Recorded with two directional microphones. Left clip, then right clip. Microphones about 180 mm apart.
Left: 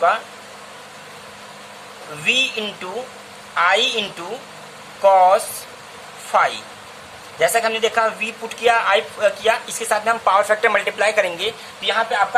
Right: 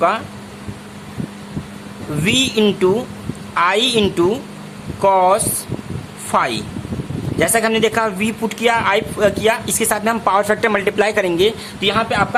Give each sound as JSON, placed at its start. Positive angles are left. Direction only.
{"t": 2.2, "sound": "a man's voice", "side_deg": -35}
{"t": 11.8, "sound": "speech", "side_deg": -45}